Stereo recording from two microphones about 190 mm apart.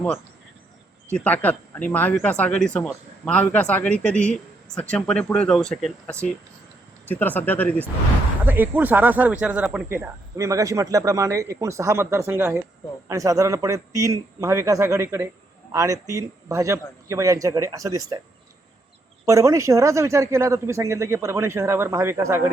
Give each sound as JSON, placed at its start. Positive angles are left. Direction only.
{"t": 1.1, "sound": "speech", "side_deg": 10}
{"t": 8.4, "sound": "speech", "side_deg": -10}
{"t": 19.2, "sound": "speech", "side_deg": -15}